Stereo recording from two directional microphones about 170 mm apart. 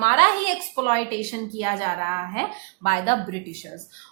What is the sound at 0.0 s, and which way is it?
A woman's voice, 45° left (ahead or behind).